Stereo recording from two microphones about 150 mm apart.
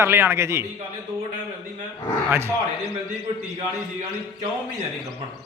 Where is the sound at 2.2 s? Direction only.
15° right (ahead or behind).